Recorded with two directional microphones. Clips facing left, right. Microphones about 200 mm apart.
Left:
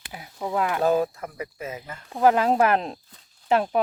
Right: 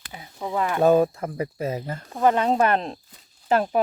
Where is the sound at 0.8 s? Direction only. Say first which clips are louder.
Right 8 dB; 25° right (ahead or behind).